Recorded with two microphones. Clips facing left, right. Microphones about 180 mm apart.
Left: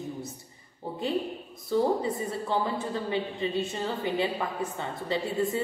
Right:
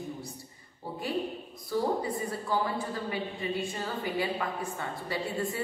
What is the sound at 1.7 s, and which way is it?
A woman's voice, 25° left (ahead or behind).